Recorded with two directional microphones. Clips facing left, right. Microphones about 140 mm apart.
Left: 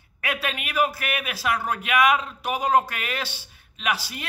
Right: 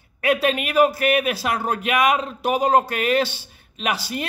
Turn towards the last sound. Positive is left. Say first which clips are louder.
# right 3 dB
turn(degrees=-25)  # may be behind; listen again after turning